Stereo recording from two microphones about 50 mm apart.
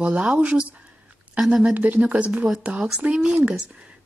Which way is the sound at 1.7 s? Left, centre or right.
Right.